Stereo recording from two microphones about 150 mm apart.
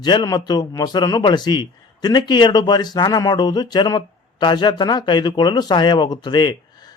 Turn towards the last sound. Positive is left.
turn(degrees=30)  # may be behind; listen again after turning